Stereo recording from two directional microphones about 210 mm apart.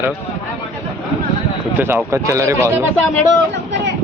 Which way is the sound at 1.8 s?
10° right (ahead or behind).